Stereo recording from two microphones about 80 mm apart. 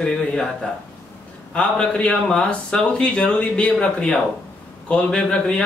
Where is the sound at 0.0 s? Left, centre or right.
Centre.